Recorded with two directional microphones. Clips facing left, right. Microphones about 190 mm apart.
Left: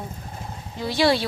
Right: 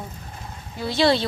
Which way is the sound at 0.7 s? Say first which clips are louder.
Right 1 dB; 15° left (ahead or behind).